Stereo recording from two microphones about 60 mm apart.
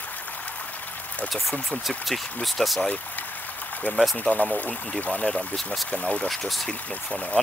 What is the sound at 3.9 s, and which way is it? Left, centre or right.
Speech, left.